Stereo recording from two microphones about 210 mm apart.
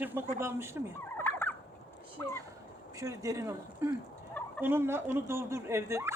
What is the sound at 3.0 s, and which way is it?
Speech, 15° right (ahead or behind).